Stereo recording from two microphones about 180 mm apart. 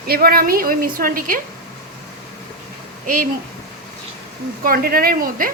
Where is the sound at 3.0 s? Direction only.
50° right (ahead or behind).